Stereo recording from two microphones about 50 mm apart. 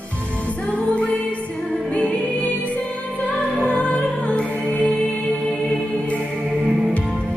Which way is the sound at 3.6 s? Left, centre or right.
Left.